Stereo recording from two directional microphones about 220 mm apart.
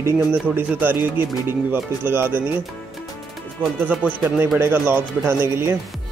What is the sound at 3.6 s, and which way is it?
Speech, 10° right (ahead or behind).